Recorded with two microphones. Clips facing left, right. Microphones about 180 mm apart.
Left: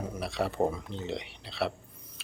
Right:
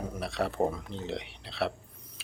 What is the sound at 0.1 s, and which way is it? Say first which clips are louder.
Speech: even; centre (ahead or behind).